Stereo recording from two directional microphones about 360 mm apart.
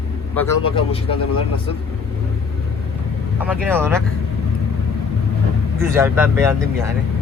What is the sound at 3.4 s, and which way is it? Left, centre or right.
Speech, centre.